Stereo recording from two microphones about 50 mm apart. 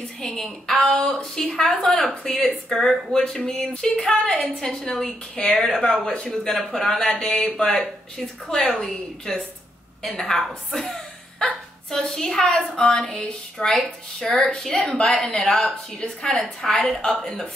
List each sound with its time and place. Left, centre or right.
0.2 s a woman's voice: centre